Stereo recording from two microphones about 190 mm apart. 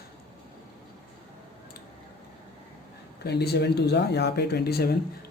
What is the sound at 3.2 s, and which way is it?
Speech, 60° left (ahead or behind).